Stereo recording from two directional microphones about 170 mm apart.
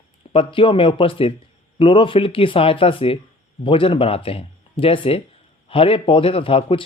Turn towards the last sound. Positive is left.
turn(degrees=30)  # may be behind; listen again after turning